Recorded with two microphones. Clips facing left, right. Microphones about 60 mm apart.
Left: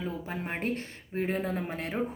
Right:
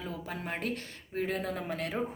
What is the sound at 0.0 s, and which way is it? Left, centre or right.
A woman's voice, left.